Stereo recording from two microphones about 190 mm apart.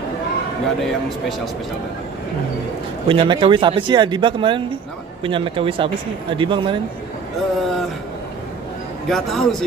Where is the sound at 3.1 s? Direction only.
25° right (ahead or behind).